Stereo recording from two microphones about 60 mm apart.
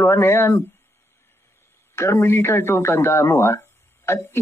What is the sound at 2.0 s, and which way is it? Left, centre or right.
Speech, left.